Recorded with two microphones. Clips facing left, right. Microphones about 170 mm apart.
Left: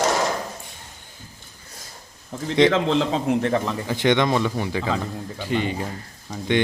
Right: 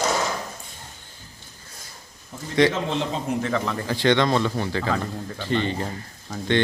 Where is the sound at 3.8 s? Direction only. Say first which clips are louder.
Right 1 dB; 20° left (ahead or behind).